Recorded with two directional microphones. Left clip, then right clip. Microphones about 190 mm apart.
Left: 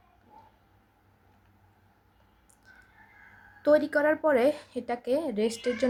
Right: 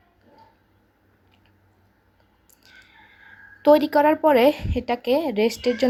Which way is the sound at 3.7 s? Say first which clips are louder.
Right 3 dB; 20° right (ahead or behind).